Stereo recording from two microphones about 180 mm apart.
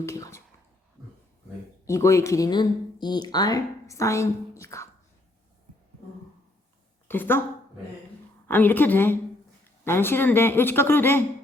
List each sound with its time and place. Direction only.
0.0 s speech: 15° left (ahead or behind)
1.8 s speech: 15° left (ahead or behind)
7.1 s speech: 10° left (ahead or behind)
8.4 s speech: 10° left (ahead or behind)